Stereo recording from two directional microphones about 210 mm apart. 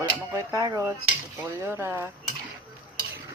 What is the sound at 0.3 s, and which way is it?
Dishes, 15° right (ahead or behind).